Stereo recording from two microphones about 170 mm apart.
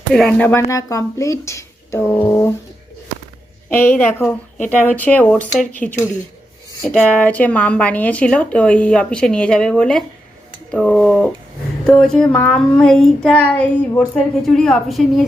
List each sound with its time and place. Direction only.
0.1 s speech: 5° left (ahead or behind)
3.7 s a woman's voice: 10° left (ahead or behind)